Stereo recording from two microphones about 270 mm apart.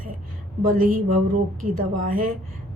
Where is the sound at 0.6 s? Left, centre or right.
Right.